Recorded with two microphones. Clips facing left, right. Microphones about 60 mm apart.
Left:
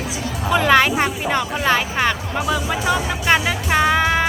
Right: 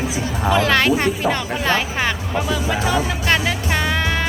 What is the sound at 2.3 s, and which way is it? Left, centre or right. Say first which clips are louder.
Music: even; centre.